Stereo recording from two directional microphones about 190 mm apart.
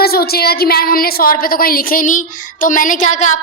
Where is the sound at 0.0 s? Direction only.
55° left (ahead or behind).